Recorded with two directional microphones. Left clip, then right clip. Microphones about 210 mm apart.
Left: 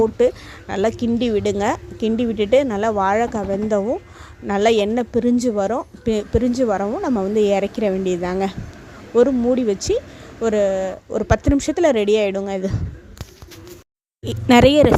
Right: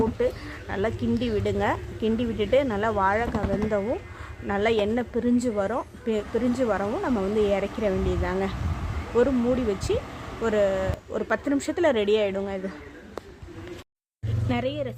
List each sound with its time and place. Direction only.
0.7 s a woman's voice: 35° left (ahead or behind)
14.4 s speech: 55° left (ahead or behind)